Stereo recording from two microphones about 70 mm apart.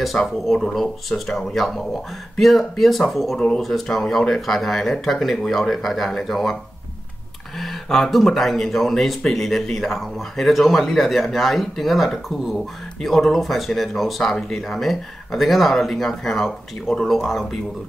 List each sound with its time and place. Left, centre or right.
0.0 s speech: centre
3.3 s speech: centre
3.6 s speech: centre
7.5 s speech: centre